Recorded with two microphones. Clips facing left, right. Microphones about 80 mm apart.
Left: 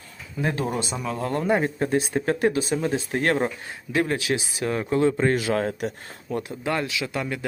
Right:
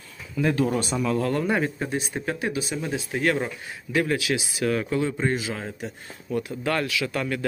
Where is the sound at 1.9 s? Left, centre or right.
Left.